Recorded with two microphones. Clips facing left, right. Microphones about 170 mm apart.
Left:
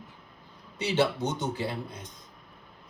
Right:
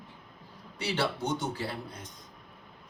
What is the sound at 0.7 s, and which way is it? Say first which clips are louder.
A woman's voice: left 5 dB; 20° left (ahead or behind).